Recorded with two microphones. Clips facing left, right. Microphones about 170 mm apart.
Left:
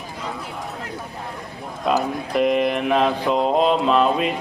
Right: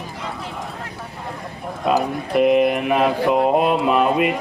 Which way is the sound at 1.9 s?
5° right (ahead or behind).